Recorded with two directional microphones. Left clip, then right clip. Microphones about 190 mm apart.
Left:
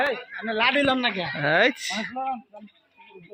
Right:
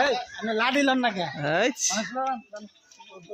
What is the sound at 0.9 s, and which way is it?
Speech, 25° right (ahead or behind).